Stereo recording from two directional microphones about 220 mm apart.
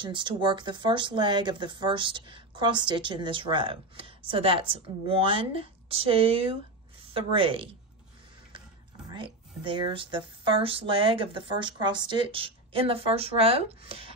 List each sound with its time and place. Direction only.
0.0 s speech: 20° right (ahead or behind)
9.1 s speech: 20° right (ahead or behind)